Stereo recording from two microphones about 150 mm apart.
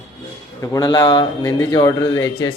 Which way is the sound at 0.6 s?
25° left (ahead or behind).